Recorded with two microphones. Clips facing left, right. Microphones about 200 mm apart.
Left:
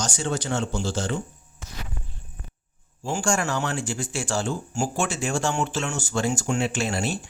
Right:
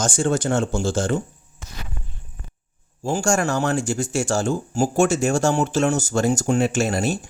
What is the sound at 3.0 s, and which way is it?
Speech, 40° right (ahead or behind).